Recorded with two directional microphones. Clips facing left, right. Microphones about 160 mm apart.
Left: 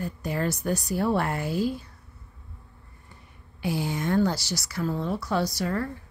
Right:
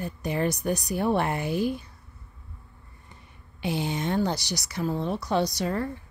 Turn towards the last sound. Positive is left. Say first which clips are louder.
# right 1 dB
turn(degrees=-20)  # may be behind; listen again after turning